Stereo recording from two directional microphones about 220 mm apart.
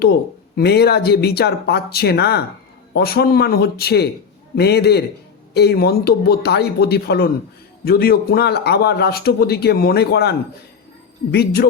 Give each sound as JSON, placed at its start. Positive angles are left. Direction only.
{"t": 0.5, "sound": "speech", "side_deg": 50}